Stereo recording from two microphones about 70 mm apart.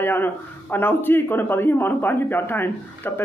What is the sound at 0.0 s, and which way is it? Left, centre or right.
Speech, left.